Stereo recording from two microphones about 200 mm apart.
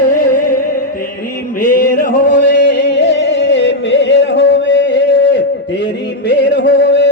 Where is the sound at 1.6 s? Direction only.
45° left (ahead or behind); by 5.4 s 60° left (ahead or behind).